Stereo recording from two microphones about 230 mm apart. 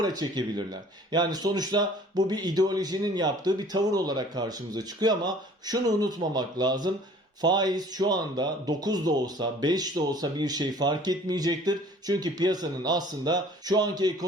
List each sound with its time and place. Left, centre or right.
0.0 s speech: centre